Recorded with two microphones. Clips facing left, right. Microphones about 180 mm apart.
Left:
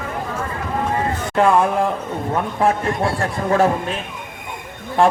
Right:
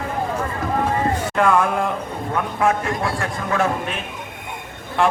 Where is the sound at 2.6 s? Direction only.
30° left (ahead or behind).